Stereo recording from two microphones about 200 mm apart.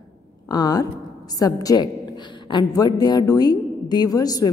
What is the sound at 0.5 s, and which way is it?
A woman's voice, 20° left (ahead or behind).